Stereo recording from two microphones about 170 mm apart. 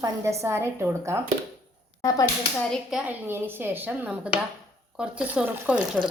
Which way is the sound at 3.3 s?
10° right (ahead or behind).